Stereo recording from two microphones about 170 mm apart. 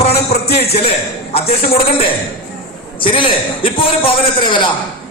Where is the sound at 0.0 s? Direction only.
35° left (ahead or behind).